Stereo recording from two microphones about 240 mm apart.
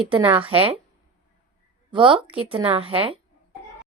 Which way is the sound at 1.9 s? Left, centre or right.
Right.